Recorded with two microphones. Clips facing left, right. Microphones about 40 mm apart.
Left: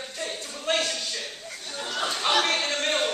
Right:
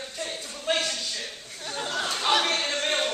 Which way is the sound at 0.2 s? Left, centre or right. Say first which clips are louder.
Left 1 dB; centre.